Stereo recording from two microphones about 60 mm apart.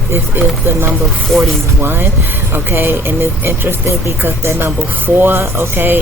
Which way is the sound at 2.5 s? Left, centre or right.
Right.